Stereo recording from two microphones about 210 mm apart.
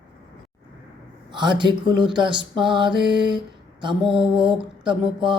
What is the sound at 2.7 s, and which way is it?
Mantra, 20° right (ahead or behind).